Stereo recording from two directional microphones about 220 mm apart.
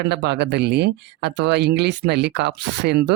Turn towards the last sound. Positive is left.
turn(degrees=-50)  # may be behind; listen again after turning